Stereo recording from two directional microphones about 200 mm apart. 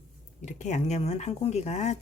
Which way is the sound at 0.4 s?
35° left (ahead or behind).